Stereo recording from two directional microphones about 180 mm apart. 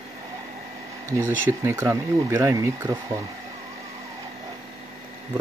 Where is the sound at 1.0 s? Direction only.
15° right (ahead or behind).